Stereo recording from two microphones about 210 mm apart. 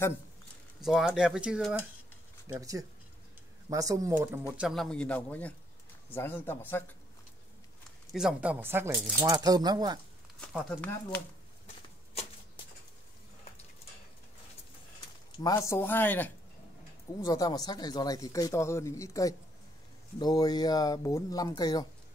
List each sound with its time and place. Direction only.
0.8 s speech: 5° right (ahead or behind)
2.4 s speech: 15° right (ahead or behind); by 6.8 s 10° left (ahead or behind)
8.1 s speech: 5° right (ahead or behind)
9.2 s speech: 20° right (ahead or behind)
10.4 s speech: centre (ahead or behind)
11.6 s a sound: 30° left (ahead or behind)
15.3 s speech: 20° left (ahead or behind)